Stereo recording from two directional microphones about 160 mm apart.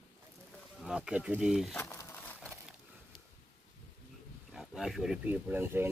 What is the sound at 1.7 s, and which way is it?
Crumpling, 15° left (ahead or behind).